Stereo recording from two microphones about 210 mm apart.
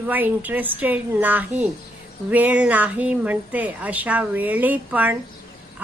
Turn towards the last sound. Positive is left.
turn(degrees=-5)  # may be behind; listen again after turning